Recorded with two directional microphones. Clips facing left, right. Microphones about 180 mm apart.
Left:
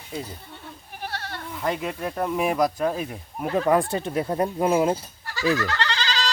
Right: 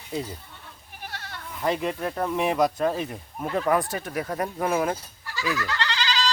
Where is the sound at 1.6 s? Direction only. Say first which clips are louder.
Right 2 dB; centre (ahead or behind).